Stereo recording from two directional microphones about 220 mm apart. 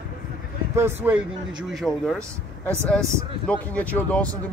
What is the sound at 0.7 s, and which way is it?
Speech, 10° right (ahead or behind).